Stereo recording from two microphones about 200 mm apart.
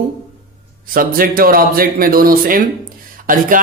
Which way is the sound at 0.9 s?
45° right (ahead or behind).